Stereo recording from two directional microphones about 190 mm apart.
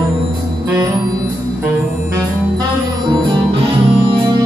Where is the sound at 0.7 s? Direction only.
20° right (ahead or behind).